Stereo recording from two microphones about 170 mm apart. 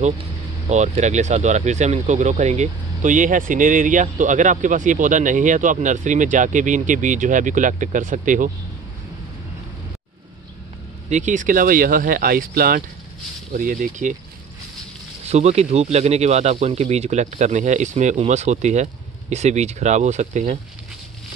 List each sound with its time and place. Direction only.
0.7 s speech: 40° right (ahead or behind)
11.1 s speech: 45° right (ahead or behind)
15.2 s speech: 40° right (ahead or behind)